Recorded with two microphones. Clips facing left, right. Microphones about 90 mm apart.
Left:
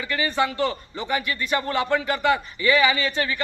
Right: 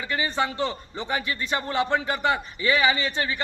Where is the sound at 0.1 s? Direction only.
25° right (ahead or behind).